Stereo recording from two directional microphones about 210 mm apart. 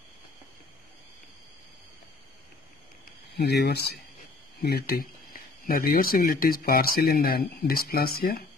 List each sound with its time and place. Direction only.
3.3 s speech: 50° left (ahead or behind)